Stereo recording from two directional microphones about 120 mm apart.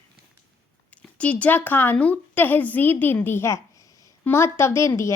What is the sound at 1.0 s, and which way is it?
A woman's voice, 10° left (ahead or behind).